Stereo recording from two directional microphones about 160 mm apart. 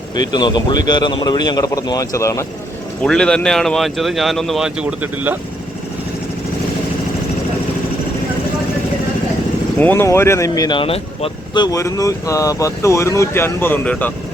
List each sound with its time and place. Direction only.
0.2 s speech: 25° left (ahead or behind)
3.0 s speech: 5° left (ahead or behind)
9.8 s speech: 15° left (ahead or behind)